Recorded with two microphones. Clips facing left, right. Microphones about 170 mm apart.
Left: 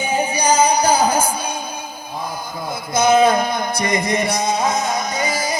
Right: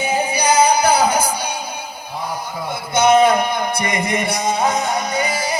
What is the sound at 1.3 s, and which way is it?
Music, 70° right (ahead or behind).